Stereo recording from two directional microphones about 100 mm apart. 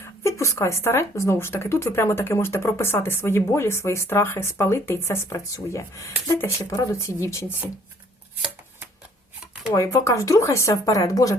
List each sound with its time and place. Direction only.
0.0 s speech: 30° left (ahead or behind)
9.7 s speech: 30° left (ahead or behind)